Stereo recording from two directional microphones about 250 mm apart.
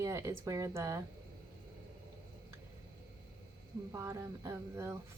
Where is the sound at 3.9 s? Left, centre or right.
Centre.